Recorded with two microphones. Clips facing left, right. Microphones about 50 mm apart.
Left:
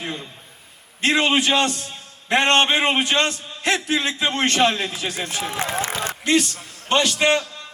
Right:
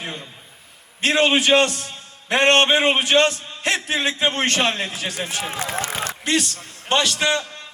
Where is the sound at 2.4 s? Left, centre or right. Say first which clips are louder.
Right 3 dB; right.